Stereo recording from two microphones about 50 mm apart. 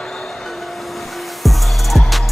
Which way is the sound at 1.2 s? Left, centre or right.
Centre.